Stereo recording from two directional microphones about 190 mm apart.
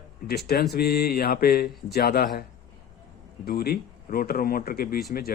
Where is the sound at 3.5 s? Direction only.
55° left (ahead or behind).